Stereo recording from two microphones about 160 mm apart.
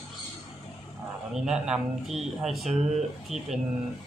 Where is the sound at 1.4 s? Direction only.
5° right (ahead or behind).